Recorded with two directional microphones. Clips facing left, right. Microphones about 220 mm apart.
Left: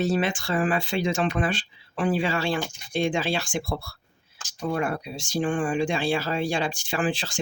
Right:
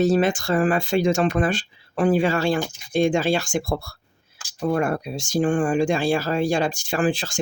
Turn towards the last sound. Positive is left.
turn(degrees=-45)  # may be behind; listen again after turning